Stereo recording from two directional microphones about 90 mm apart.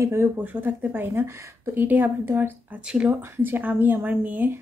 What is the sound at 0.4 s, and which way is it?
Speech, 20° right (ahead or behind).